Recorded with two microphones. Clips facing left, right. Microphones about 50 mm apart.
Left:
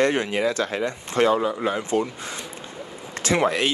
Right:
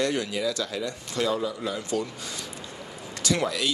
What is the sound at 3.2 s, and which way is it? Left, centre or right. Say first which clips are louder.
Speech: left 5 dB; left.